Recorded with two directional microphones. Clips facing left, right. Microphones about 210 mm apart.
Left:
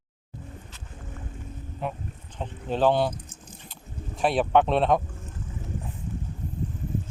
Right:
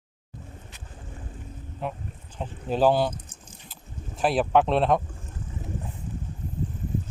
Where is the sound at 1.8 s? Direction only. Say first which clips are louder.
Even; centre (ahead or behind).